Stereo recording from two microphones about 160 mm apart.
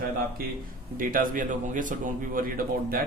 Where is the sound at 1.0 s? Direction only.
60° right (ahead or behind).